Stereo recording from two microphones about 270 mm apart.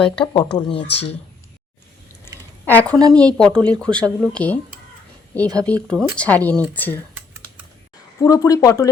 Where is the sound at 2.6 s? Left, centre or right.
Centre.